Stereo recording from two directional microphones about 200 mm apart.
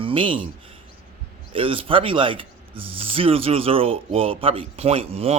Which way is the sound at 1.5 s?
25° right (ahead or behind).